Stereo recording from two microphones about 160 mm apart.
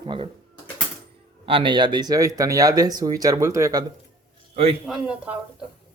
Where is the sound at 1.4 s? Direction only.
30° right (ahead or behind).